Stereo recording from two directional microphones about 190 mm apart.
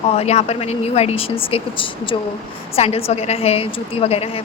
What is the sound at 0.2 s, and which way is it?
Speech, 35° left (ahead or behind).